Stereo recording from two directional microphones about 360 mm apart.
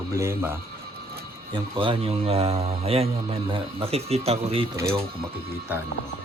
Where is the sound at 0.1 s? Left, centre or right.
Centre.